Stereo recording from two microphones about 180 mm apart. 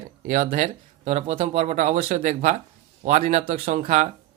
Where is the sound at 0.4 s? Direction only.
40° right (ahead or behind).